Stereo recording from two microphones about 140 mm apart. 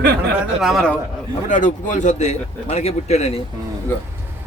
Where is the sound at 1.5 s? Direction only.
65° left (ahead or behind).